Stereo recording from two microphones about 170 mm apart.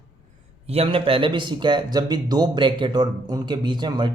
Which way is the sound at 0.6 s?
35° right (ahead or behind).